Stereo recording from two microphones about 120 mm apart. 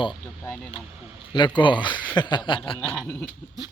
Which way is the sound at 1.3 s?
40° left (ahead or behind).